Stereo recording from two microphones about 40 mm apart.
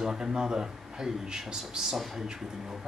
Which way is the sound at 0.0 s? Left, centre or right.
Centre.